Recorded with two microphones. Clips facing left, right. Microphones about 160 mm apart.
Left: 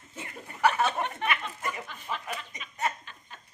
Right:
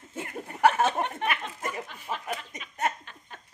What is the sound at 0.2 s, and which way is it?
Chuckle, 45° right (ahead or behind).